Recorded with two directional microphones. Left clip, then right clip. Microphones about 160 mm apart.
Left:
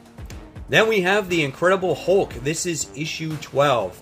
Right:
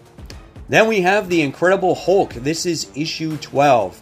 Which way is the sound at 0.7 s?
30° right (ahead or behind).